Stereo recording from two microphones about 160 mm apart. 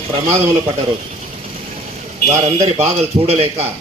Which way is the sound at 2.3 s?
40° right (ahead or behind).